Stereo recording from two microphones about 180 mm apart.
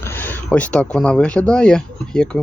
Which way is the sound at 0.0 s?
10° left (ahead or behind).